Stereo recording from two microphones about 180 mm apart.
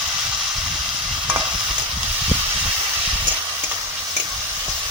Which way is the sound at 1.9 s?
5° right (ahead or behind).